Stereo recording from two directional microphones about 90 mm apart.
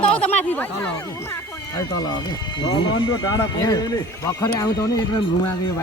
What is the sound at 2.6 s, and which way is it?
A man's voice, 65° left (ahead or behind).